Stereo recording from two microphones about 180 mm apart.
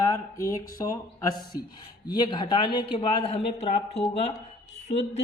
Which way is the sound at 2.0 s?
25° left (ahead or behind).